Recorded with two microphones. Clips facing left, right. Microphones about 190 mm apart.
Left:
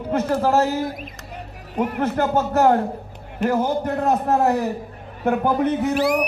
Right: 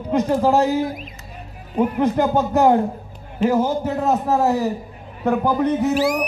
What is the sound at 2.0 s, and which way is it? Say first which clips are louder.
A man's voice: right 1 dB; 15° right (ahead or behind).